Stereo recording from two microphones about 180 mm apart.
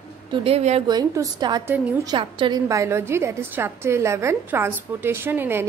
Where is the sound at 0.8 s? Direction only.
25° right (ahead or behind).